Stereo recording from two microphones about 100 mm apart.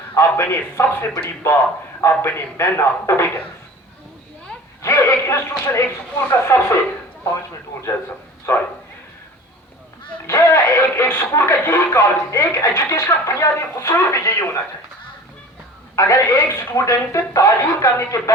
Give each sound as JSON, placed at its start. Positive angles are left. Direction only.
{"t": 0.1, "sound": "speech", "side_deg": 25}
{"t": 4.8, "sound": "speech", "side_deg": 30}
{"t": 8.5, "sound": "speech", "side_deg": 25}
{"t": 10.2, "sound": "speech", "side_deg": 30}
{"t": 16.0, "sound": "speech", "side_deg": 30}